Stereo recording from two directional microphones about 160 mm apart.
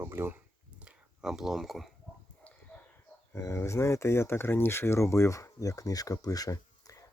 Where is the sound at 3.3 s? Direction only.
15° left (ahead or behind).